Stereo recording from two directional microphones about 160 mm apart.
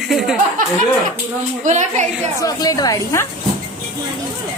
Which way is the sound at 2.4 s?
25° left (ahead or behind).